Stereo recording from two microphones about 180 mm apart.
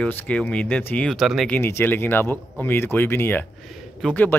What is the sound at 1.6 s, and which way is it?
Speech, 15° left (ahead or behind).